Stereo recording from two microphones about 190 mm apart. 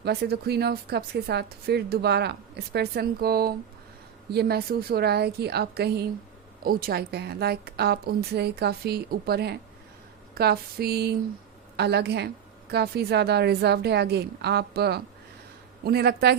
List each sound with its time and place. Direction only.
0.0 s a woman's voice: 60° right (ahead or behind)